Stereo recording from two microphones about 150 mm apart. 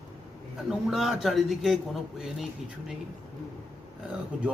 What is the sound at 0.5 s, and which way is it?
A man's voice, 5° right (ahead or behind).